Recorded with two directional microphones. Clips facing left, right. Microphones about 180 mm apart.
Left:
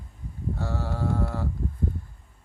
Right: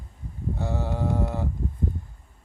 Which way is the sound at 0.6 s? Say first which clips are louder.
Right 3 dB; 20° right (ahead or behind).